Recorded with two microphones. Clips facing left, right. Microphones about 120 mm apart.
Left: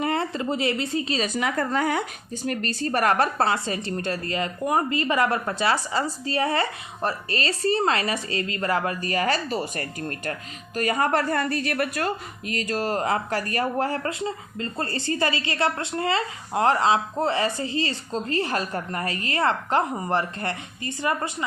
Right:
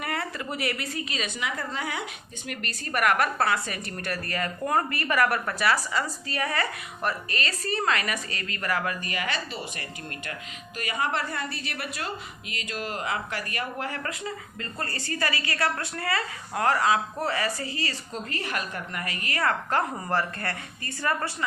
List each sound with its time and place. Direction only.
0.0 s a woman's voice: 25° left (ahead or behind)